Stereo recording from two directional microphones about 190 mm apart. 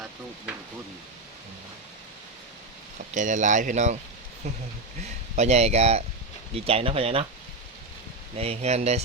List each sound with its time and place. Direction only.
3.2 s speech: 40° right (ahead or behind)
8.4 s speech: 35° right (ahead or behind)